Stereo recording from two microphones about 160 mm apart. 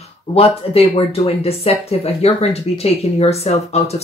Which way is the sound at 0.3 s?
35° left (ahead or behind).